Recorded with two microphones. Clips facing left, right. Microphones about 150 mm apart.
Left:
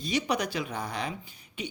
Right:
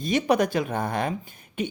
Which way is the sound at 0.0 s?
50° right (ahead or behind).